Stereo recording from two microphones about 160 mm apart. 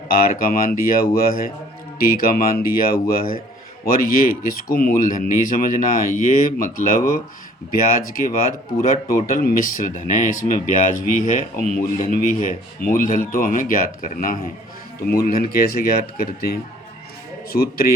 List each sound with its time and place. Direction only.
0.1 s speech: 65° left (ahead or behind)
15.2 s speech: 75° left (ahead or behind)